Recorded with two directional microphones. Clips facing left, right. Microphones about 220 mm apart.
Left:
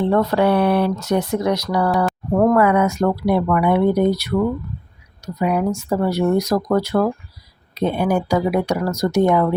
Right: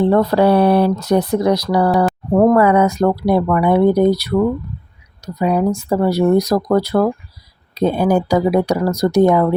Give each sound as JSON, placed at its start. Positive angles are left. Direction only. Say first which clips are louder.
{"t": 0.0, "sound": "speech", "louder": "right 4 dB", "side_deg": -35}